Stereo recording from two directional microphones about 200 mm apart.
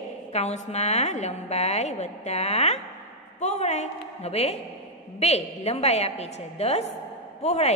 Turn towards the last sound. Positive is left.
turn(degrees=35)  # may be behind; listen again after turning